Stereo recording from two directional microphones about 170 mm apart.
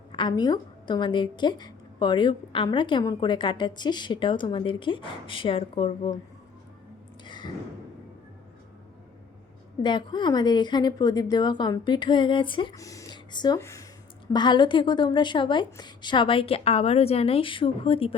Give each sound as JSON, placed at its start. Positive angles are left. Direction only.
{"t": 0.1, "sound": "a woman's voice", "side_deg": 25}
{"t": 7.3, "sound": "a sound", "side_deg": 25}
{"t": 9.8, "sound": "a woman's voice", "side_deg": 25}